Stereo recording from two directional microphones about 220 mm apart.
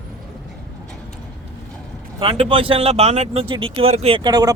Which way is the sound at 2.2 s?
25° right (ahead or behind).